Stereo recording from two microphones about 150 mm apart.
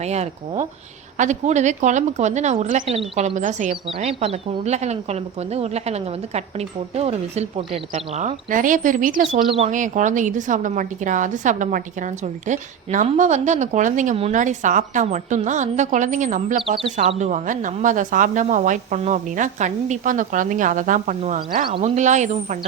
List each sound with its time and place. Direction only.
0.0 s speech: 45° right (ahead or behind)
3.8 s speech: 40° right (ahead or behind); by 9.4 s 60° right (ahead or behind)
9.5 s a woman's voice: 50° right (ahead or behind)
16.7 s a woman's voice: 45° right (ahead or behind); by 21.8 s 60° right (ahead or behind)
21.8 s speech: 50° right (ahead or behind)